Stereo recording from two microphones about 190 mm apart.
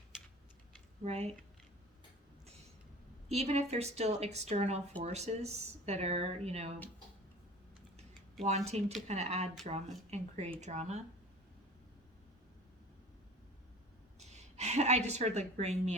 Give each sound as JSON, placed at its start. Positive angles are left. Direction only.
{"t": 1.0, "sound": "a woman's voice", "side_deg": -35}
{"t": 3.2, "sound": "a woman's voice", "side_deg": -35}
{"t": 8.4, "sound": "a woman's voice", "side_deg": -35}
{"t": 14.2, "sound": "a woman's voice", "side_deg": -35}